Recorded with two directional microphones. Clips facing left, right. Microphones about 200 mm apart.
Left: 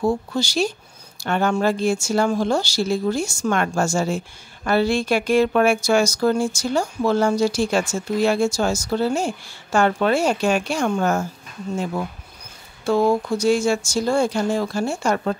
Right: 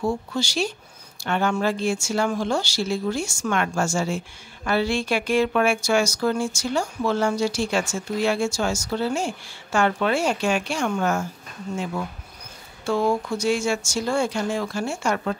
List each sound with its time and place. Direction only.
0.0 s speech: 35° left (ahead or behind)